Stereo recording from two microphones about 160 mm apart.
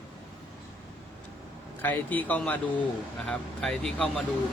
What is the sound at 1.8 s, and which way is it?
A man's voice, 10° left (ahead or behind).